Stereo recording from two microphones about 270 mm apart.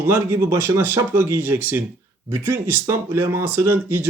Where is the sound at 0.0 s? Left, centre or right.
Centre.